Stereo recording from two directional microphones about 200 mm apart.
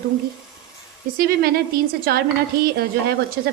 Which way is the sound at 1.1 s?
50° right (ahead or behind).